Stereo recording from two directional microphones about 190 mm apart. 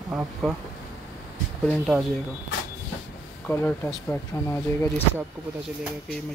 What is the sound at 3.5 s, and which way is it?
Speech, 10° left (ahead or behind).